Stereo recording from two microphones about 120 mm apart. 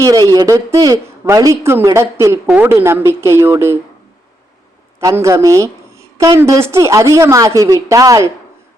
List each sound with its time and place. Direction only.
0.0 s a woman's voice: 30° right (ahead or behind)
4.9 s a woman's voice: 25° right (ahead or behind)